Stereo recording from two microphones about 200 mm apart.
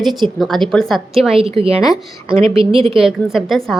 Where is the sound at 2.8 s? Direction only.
Centre (ahead or behind).